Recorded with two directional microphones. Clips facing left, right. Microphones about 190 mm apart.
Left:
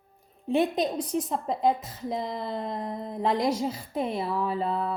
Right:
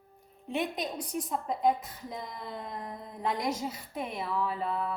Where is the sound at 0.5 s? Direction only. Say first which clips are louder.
Left 8 dB; 30° left (ahead or behind).